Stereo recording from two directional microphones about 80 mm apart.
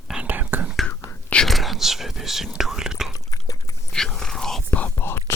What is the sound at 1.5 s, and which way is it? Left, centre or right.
Whispering, centre.